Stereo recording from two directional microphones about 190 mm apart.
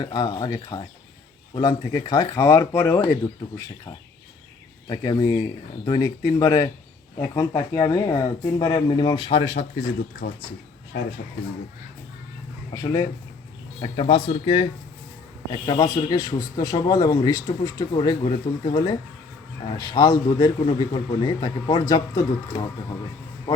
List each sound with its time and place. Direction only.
0.0 s speech: 20° left (ahead or behind)
4.9 s speech: 20° left (ahead or behind)
9.8 s speech: 50° left (ahead or behind)
12.7 s speech: 20° left (ahead or behind)